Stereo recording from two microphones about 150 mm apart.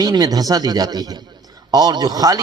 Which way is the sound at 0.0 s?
25° right (ahead or behind).